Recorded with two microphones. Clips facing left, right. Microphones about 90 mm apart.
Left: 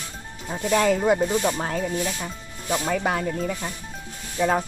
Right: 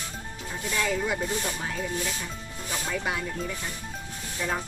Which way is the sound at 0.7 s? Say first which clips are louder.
Left 9 dB; 50° left (ahead or behind).